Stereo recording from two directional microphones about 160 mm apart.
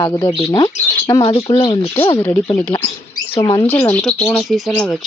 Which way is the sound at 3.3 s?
35° left (ahead or behind).